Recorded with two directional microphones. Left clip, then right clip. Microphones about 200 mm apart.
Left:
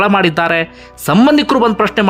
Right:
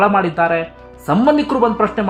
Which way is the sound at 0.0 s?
20° left (ahead or behind).